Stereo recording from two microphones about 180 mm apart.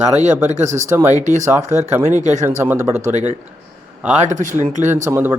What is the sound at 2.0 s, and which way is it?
Speech, 40° right (ahead or behind).